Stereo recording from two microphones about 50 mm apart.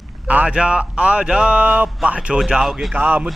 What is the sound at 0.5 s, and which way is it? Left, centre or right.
A man's voice, centre.